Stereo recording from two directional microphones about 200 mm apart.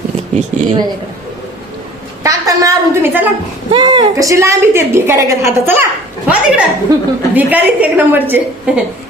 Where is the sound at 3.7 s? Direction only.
20° right (ahead or behind).